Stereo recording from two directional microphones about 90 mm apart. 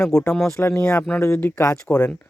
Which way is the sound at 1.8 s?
15° left (ahead or behind).